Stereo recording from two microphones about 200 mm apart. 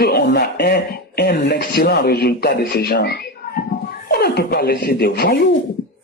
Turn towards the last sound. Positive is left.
turn(degrees=50)  # may be behind; listen again after turning